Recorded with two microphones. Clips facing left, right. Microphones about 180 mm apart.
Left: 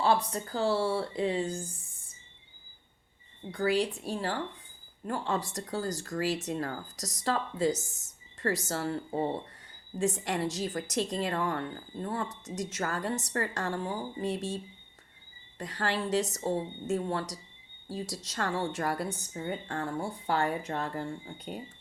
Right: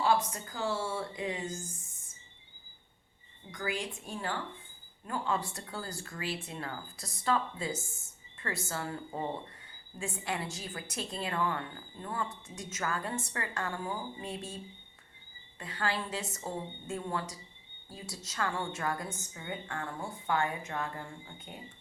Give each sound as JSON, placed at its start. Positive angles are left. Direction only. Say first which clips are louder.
{"t": 0.0, "sound": "speech", "louder": "left 2 dB", "side_deg": 35}
{"t": 3.5, "sound": "speech", "louder": "left 9 dB", "side_deg": 35}
{"t": 15.5, "sound": "speech", "louder": "left 3 dB", "side_deg": 40}